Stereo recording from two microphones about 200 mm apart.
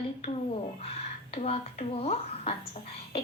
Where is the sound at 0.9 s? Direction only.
30° left (ahead or behind).